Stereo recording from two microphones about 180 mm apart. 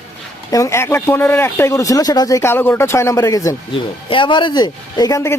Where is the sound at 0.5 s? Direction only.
15° left (ahead or behind).